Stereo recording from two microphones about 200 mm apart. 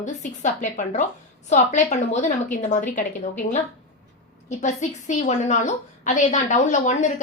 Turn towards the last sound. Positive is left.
turn(degrees=35)  # may be behind; listen again after turning